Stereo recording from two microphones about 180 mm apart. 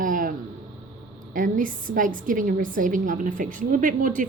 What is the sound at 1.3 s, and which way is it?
A woman's voice, 50° right (ahead or behind).